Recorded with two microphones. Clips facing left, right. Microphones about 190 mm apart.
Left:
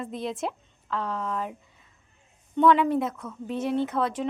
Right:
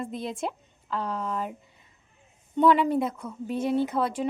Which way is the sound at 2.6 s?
5° right (ahead or behind).